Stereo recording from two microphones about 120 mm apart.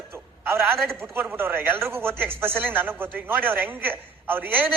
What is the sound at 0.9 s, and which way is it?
A man's voice, 20° right (ahead or behind).